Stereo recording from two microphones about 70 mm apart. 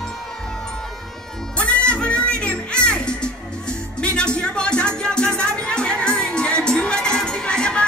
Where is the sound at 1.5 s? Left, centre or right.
Centre.